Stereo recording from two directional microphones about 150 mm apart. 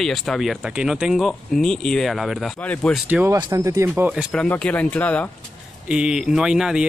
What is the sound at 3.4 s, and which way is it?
Speech, 25° right (ahead or behind).